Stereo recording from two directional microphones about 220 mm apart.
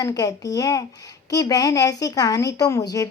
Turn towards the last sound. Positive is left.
turn(degrees=15)  # may be behind; listen again after turning